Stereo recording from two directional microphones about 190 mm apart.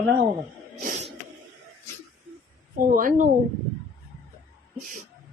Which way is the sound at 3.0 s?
45° right (ahead or behind).